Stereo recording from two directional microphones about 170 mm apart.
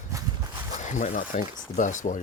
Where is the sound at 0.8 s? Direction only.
45° left (ahead or behind).